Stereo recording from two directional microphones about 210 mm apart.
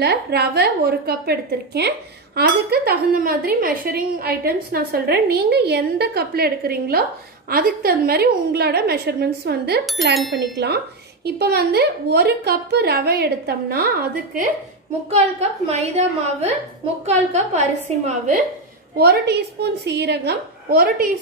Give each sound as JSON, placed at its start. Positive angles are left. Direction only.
{"t": 0.0, "sound": "a woman's voice", "side_deg": -50}
{"t": 10.1, "sound": "speech", "side_deg": 0}
{"t": 10.4, "sound": "a woman's voice", "side_deg": -55}
{"t": 15.1, "sound": "a woman's voice", "side_deg": -30}
{"t": 18.9, "sound": "a woman's voice", "side_deg": -50}